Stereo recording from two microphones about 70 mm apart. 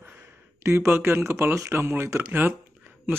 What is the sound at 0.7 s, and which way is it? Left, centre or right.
Speech, right.